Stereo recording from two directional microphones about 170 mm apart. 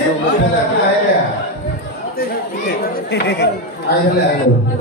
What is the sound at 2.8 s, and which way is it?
Chatter, 80° left.